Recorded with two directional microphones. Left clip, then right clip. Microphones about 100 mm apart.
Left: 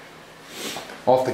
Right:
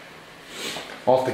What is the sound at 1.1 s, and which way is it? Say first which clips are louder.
Speech: left 1 dB; 20° left (ahead or behind).